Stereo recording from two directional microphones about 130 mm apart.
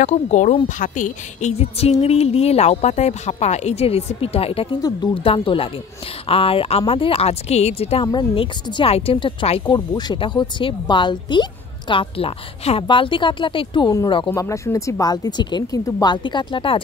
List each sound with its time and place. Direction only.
0.0 s speech: 65° left (ahead or behind)
0.7 s speech: 85° left
1.6 s a woman's voice: 55° left (ahead or behind)
8.1 s speech: 35° left (ahead or behind)
14.3 s speech: 25° left (ahead or behind); by 16.8 s 40° left (ahead or behind)